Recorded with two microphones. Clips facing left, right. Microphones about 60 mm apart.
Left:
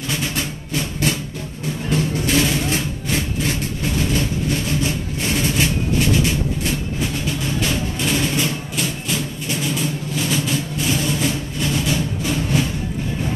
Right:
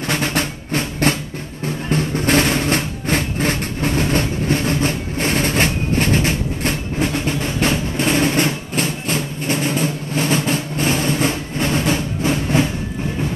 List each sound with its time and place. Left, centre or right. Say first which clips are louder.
0.1 s drum: right 4 dB; right
1.9 s music: right 3 dB; right